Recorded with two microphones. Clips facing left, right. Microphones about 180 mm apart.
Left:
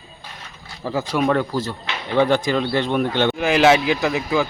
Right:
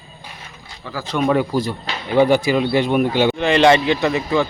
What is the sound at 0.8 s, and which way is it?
Speech, 30° left (ahead or behind).